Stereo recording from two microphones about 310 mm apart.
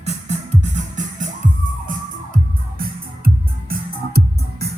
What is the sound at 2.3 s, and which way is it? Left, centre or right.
Music, right.